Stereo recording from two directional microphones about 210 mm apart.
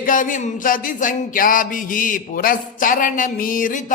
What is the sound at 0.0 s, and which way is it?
A woman's voice, 40° left (ahead or behind).